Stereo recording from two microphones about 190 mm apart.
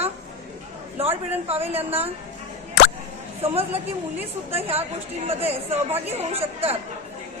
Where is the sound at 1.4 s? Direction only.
30° right (ahead or behind).